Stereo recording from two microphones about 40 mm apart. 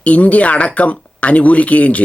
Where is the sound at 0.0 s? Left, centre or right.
Left.